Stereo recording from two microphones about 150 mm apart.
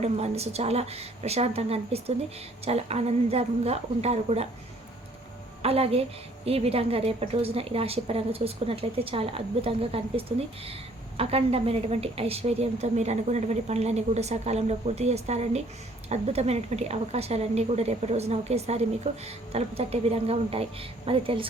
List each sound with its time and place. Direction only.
0.0 s a woman's voice: 45° right (ahead or behind)
5.6 s a woman's voice: 40° right (ahead or behind)